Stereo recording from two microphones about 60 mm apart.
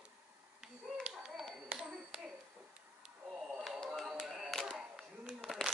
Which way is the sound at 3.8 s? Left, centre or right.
Centre.